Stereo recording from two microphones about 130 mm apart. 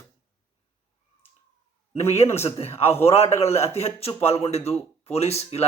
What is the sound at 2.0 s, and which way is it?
A man's voice, 55° left (ahead or behind).